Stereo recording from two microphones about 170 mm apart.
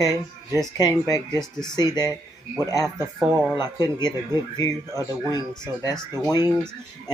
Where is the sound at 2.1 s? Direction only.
15° right (ahead or behind).